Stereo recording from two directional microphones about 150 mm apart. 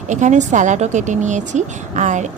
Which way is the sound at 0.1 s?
55° right (ahead or behind).